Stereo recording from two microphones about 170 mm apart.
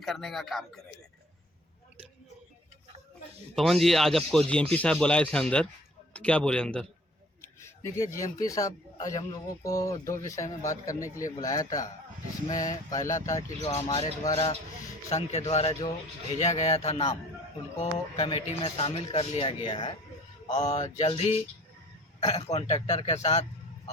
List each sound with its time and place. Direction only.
0.0 s speech: centre (ahead or behind)
3.5 s speech: centre (ahead or behind)
7.4 s speech: 15° left (ahead or behind)
13.6 s speech: 35° left (ahead or behind)
15.1 s speech: 40° left (ahead or behind)
20.5 s speech: 40° left (ahead or behind)
22.4 s a man's voice: 40° left (ahead or behind)